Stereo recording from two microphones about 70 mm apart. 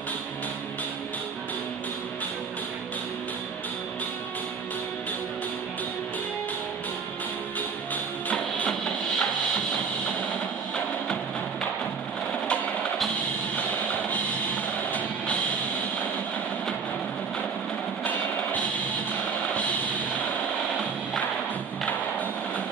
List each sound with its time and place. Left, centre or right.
7.9 s music: left
8.6 s music: centre
14.9 s music: left